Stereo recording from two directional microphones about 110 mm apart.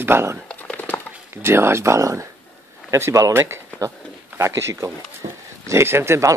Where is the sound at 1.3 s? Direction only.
20° right (ahead or behind).